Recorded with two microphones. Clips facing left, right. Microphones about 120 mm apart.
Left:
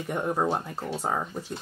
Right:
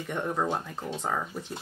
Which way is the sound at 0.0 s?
10° left (ahead or behind).